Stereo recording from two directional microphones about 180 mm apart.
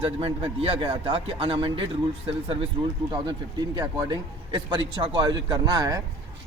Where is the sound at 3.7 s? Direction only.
20° right (ahead or behind).